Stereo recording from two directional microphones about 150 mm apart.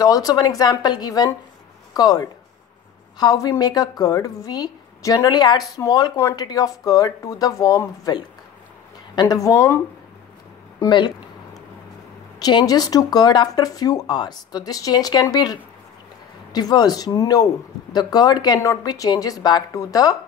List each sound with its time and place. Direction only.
0.0 s a woman's voice: 25° left (ahead or behind)
10.8 s a sound: 30° left (ahead or behind)
12.4 s a woman's voice: 25° left (ahead or behind)